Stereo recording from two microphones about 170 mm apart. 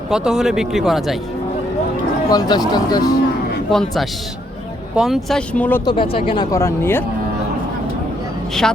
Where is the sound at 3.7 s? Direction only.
Centre (ahead or behind).